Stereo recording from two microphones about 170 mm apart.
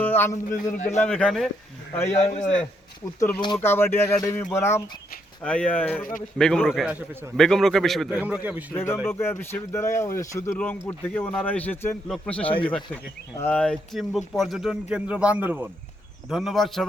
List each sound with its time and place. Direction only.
0.0 s a sound: 10° left (ahead or behind)
0.5 s a man's voice: 45° left (ahead or behind)
1.0 s speech: 5° left (ahead or behind)
2.1 s a man's voice: 40° left (ahead or behind)
3.2 s speech: 10° left (ahead or behind); by 7.3 s 10° right (ahead or behind)
7.3 s speech: centre (ahead or behind)
8.2 s a man's voice: 10° right (ahead or behind)
8.7 s speech: 15° left (ahead or behind)